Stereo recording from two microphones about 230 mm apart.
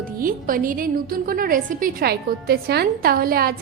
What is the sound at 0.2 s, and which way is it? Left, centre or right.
A woman's voice, right.